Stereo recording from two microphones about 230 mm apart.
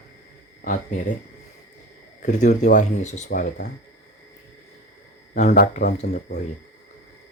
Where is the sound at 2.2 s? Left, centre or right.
Left.